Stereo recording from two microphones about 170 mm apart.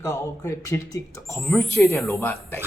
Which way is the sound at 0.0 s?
20° left (ahead or behind).